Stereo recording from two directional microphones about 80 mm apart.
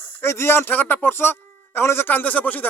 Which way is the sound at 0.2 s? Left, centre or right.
Left.